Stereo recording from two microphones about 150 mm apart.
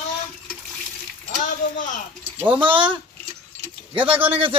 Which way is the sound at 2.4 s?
10° right (ahead or behind).